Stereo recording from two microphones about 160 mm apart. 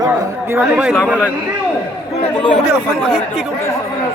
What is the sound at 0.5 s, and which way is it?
Speech, 10° right (ahead or behind).